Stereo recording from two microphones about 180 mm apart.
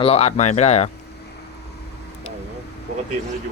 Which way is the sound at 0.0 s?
35° left (ahead or behind).